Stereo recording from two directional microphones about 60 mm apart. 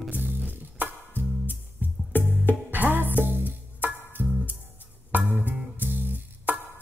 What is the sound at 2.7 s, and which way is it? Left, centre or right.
Music, right.